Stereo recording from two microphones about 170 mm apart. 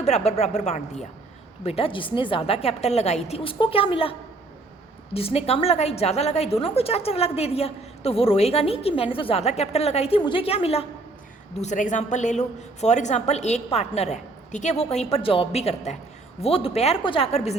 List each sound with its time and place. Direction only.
0.0 s a woman's voice: 40° left (ahead or behind)
5.1 s a woman's voice: 35° left (ahead or behind)